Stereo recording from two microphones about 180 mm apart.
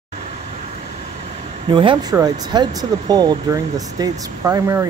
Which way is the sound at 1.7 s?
30° right (ahead or behind).